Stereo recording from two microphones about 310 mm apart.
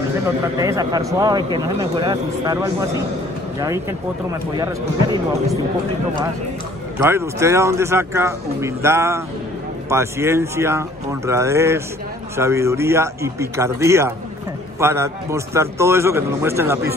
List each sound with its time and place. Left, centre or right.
0.6 s a man's voice: centre
7.0 s a man's voice: centre